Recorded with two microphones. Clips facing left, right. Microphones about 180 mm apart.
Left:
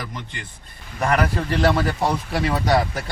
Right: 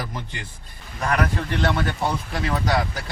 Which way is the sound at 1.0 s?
30° left (ahead or behind).